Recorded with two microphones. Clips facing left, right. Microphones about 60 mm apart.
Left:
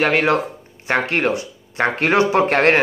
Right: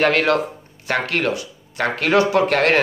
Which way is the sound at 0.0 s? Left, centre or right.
Centre.